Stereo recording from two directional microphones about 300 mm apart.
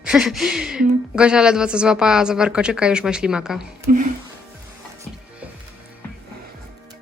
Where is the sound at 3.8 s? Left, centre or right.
Right.